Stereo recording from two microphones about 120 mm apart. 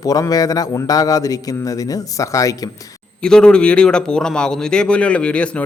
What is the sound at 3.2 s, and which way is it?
A man's voice, 5° left (ahead or behind).